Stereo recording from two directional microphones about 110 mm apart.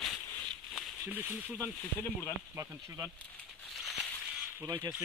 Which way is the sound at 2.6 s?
20° right (ahead or behind).